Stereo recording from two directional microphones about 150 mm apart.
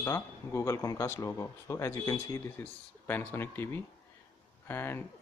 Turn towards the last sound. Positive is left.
turn(degrees=15)  # may be behind; listen again after turning